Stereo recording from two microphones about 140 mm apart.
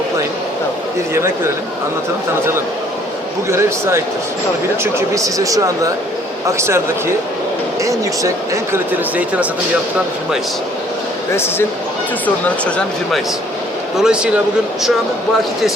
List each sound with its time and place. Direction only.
3.5 s speech: 20° right (ahead or behind)
8.7 s speech: 10° right (ahead or behind)
12.2 s speech: 10° left (ahead or behind)